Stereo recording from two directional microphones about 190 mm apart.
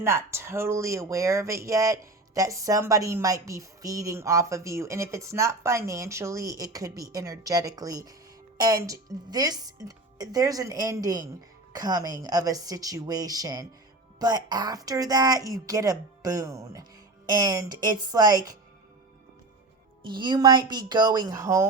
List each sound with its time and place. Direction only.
0.0 s a woman's voice: 15° right (ahead or behind)
20.0 s a woman's voice: 25° right (ahead or behind)